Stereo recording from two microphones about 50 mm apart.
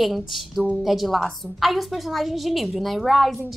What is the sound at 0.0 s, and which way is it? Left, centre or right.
A woman's voice, centre.